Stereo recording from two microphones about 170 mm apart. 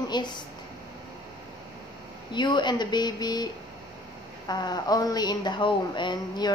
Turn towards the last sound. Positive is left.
turn(degrees=25)  # may be behind; listen again after turning